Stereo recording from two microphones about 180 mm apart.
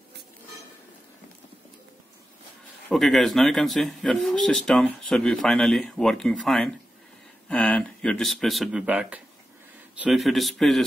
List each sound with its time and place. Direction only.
2.9 s speech: centre (ahead or behind)